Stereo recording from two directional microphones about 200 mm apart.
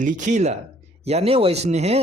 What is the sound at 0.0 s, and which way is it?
A man's voice, 40° right (ahead or behind).